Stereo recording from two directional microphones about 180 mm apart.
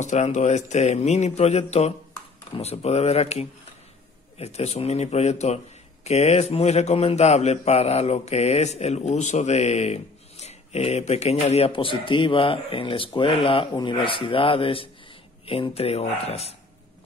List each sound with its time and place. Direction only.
0.0 s a man's voice: 40° left (ahead or behind)